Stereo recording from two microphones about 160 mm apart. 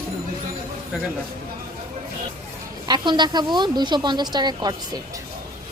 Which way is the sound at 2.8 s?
30° right (ahead or behind).